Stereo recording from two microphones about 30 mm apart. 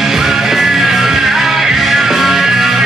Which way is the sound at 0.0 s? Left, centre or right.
Centre.